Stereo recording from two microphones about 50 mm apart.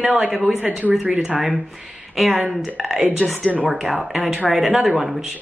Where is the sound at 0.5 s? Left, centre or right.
Right.